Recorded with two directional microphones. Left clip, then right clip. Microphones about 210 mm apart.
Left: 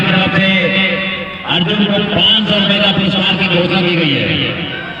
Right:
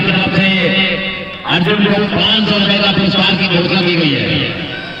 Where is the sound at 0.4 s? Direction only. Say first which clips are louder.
Even; 15° left (ahead or behind).